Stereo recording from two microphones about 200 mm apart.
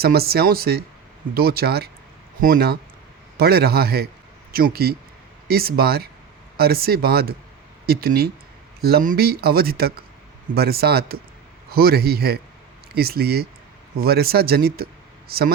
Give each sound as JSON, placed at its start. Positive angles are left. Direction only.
{"t": 0.0, "sound": "speech", "side_deg": -50}